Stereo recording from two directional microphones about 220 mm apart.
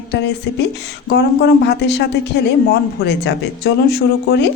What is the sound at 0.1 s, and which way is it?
A woman's voice, 50° left (ahead or behind).